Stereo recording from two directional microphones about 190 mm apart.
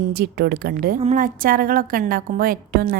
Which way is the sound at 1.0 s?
40° right (ahead or behind).